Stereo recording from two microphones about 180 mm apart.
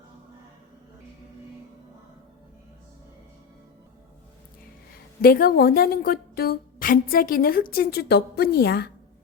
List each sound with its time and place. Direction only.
5.2 s a woman's voice: 55° left (ahead or behind)